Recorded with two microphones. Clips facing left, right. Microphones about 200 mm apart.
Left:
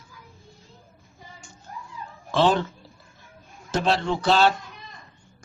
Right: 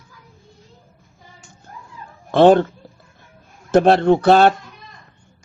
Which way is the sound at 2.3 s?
55° right (ahead or behind).